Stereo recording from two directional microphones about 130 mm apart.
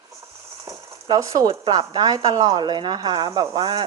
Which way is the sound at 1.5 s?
35° right (ahead or behind).